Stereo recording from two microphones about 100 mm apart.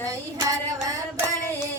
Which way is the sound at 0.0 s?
35° right (ahead or behind).